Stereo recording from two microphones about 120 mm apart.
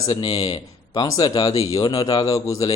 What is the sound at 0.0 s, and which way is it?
A man's voice, 35° left (ahead or behind).